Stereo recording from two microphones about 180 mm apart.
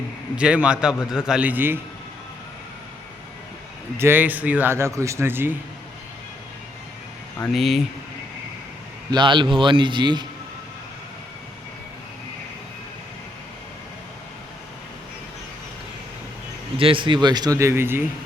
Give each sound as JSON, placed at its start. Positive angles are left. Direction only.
{"t": 0.3, "sound": "a man's voice", "side_deg": -5}
{"t": 3.9, "sound": "speech", "side_deg": -10}
{"t": 7.5, "sound": "a man's voice", "side_deg": 0}
{"t": 9.0, "sound": "speech", "side_deg": -25}
{"t": 16.7, "sound": "speech", "side_deg": -30}